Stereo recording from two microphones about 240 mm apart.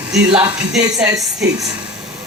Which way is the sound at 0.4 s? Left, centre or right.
Centre.